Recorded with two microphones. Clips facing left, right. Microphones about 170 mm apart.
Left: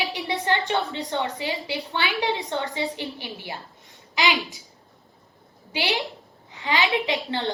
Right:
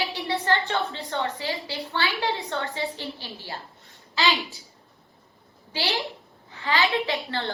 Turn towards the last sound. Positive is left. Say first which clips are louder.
# left 2 dB
turn(degrees=20)  # may be behind; listen again after turning